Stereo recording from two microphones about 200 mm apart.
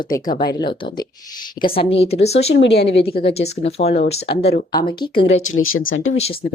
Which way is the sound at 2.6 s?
60° left (ahead or behind).